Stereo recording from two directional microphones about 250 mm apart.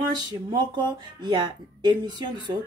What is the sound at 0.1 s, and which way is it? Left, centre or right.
Speech, centre.